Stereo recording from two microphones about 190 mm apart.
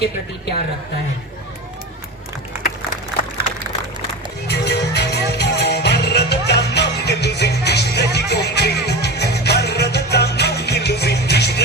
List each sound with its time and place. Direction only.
4.4 s music: 60° left (ahead or behind)